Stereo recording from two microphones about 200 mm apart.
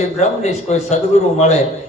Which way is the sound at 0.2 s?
35° left (ahead or behind).